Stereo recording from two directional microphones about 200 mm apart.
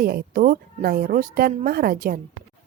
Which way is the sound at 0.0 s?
50° right (ahead or behind).